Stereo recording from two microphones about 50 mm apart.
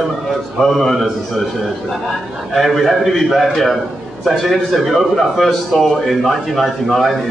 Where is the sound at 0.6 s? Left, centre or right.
Centre.